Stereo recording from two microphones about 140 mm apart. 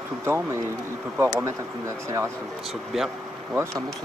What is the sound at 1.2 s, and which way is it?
Speech, 15° right (ahead or behind).